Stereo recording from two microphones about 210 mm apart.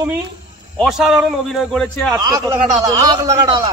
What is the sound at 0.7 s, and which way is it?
A man's voice, centre (ahead or behind).